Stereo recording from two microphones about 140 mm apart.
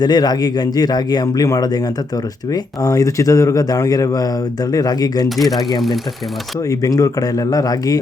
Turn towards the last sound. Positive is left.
turn(degrees=25)  # may be behind; listen again after turning